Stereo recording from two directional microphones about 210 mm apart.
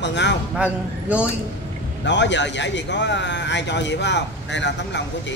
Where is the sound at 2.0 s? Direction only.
55° left (ahead or behind).